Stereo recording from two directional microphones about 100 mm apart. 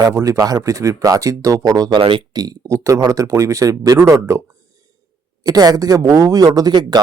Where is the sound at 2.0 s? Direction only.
60° right (ahead or behind).